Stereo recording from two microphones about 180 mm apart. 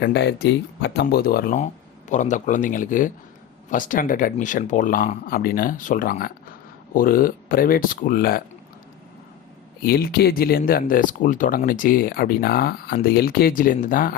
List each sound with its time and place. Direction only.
0.0 s speech: 70° left (ahead or behind)
1.5 s speech: 40° left (ahead or behind)
9.8 s speech: 55° left (ahead or behind)